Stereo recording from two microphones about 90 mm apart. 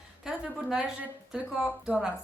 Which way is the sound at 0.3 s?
5° right (ahead or behind).